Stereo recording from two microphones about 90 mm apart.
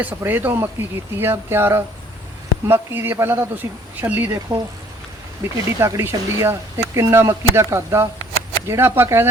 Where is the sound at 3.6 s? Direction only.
35° right (ahead or behind).